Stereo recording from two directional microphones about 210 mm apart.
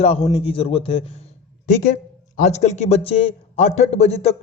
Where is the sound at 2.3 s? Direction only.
35° left (ahead or behind).